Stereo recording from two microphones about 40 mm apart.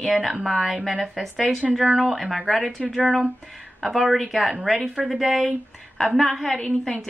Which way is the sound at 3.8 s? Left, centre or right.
Centre.